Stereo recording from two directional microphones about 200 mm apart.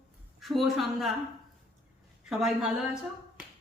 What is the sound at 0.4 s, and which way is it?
Speech, centre (ahead or behind).